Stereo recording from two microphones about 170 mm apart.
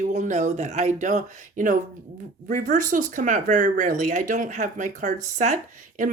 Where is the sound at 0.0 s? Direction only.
45° right (ahead or behind).